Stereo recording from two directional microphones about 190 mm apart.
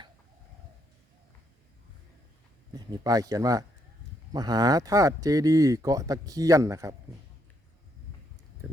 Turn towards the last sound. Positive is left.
turn(degrees=-15)  # may be behind; listen again after turning